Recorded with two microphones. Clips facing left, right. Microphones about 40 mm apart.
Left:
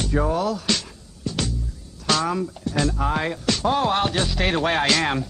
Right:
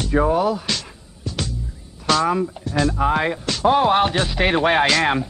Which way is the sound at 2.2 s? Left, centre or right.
Centre.